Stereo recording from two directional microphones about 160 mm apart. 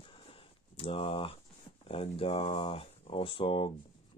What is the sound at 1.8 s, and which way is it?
Speech, 35° left (ahead or behind).